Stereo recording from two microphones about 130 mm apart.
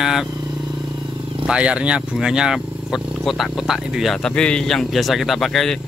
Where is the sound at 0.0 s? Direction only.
5° right (ahead or behind).